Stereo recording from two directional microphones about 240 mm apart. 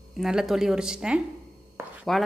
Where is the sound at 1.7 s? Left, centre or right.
Centre.